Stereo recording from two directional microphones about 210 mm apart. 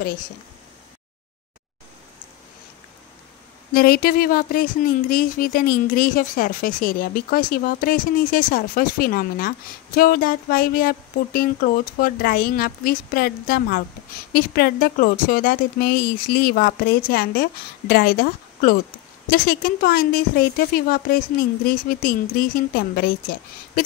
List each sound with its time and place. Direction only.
3.7 s speech: 45° left (ahead or behind)